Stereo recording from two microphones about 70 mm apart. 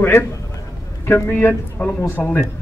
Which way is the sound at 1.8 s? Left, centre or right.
Left.